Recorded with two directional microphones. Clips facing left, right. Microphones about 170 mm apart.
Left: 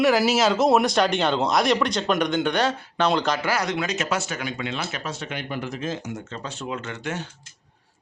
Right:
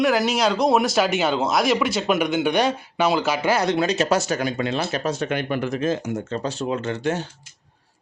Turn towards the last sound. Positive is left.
turn(degrees=-35)  # may be behind; listen again after turning